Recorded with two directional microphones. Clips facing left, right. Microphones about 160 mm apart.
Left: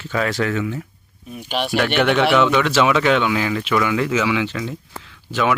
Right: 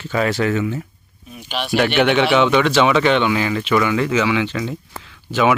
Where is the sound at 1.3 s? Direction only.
45° left (ahead or behind).